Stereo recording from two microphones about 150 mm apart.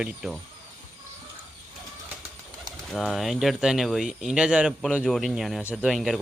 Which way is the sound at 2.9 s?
Centre (ahead or behind).